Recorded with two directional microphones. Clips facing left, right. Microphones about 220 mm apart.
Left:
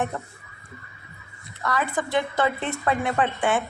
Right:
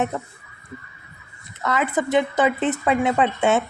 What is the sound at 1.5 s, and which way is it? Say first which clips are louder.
Speech: right 4 dB; 20° right (ahead or behind).